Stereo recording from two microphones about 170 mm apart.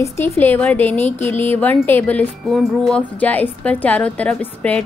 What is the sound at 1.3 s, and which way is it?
Speech, 10° left (ahead or behind).